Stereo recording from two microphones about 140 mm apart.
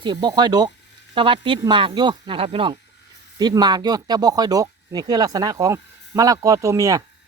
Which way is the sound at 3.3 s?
30° right (ahead or behind).